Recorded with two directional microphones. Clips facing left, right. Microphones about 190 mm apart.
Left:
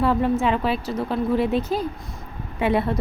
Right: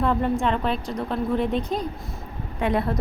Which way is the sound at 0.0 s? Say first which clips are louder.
Left 2 dB; 5° left (ahead or behind).